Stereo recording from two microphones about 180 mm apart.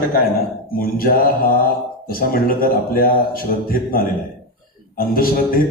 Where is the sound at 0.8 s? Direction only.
55° left (ahead or behind).